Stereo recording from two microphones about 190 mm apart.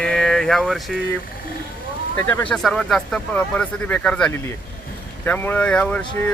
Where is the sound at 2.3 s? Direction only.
10° left (ahead or behind).